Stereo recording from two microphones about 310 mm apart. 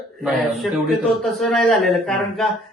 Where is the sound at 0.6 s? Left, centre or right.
Centre.